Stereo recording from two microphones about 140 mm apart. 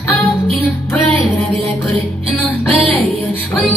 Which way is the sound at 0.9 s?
15° left (ahead or behind).